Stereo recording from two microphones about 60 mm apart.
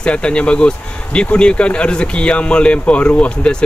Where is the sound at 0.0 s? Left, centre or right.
Centre.